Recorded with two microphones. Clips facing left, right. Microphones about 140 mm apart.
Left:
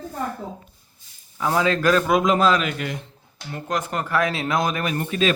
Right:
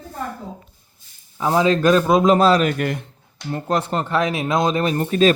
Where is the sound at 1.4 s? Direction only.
20° right (ahead or behind).